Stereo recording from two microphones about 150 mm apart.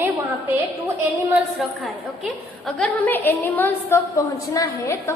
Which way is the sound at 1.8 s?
Centre (ahead or behind).